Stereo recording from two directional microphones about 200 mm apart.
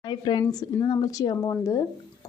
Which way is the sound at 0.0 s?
20° left (ahead or behind).